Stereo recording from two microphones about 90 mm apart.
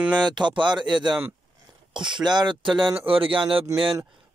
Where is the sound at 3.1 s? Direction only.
85° right.